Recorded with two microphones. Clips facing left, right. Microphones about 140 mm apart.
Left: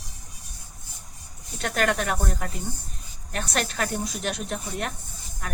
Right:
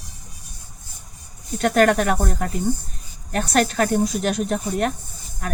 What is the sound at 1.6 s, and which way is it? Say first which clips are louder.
Speech: right 8 dB; 50° right (ahead or behind).